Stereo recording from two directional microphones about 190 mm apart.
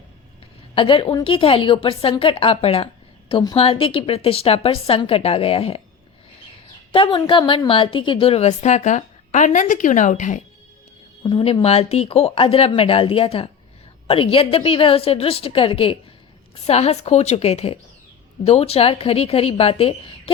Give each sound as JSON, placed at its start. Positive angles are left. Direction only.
{"t": 0.8, "sound": "a woman's voice", "side_deg": 30}
{"t": 6.9, "sound": "a woman's voice", "side_deg": 25}
{"t": 11.2, "sound": "a woman's voice", "side_deg": 30}